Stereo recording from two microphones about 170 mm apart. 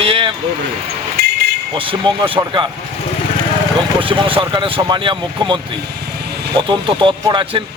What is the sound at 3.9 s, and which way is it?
Speech, 30° right (ahead or behind).